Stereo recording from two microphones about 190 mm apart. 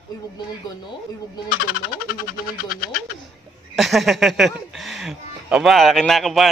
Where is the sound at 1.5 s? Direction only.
50° left (ahead or behind).